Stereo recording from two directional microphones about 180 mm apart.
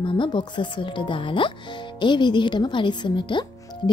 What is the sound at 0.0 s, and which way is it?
Speech, 25° left (ahead or behind).